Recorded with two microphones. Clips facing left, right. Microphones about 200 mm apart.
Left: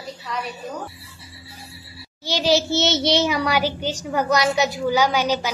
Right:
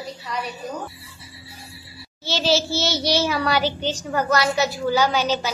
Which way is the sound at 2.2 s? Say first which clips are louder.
Left 2 dB; 15° left (ahead or behind).